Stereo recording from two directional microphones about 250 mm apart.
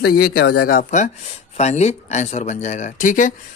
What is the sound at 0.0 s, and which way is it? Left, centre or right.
Speech, left.